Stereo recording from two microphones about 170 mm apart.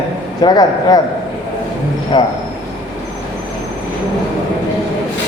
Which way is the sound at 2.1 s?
25° left (ahead or behind).